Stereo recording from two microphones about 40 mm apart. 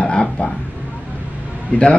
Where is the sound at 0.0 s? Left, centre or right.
Left.